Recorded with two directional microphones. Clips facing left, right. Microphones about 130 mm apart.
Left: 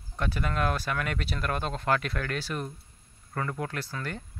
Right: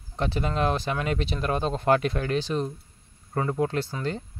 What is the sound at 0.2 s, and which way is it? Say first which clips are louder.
Speech: right 4 dB; 30° right (ahead or behind).